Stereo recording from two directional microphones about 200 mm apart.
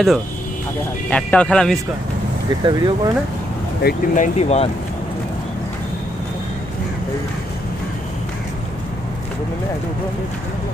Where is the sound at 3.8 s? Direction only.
40° left (ahead or behind).